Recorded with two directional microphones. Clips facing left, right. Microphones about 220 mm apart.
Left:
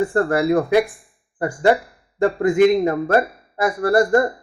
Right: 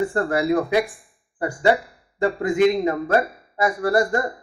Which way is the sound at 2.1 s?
50° left (ahead or behind).